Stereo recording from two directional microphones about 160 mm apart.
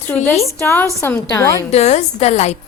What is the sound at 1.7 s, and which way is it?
Speech, 45° left (ahead or behind).